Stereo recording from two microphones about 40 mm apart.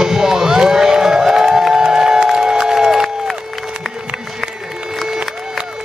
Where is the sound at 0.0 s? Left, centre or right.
Centre.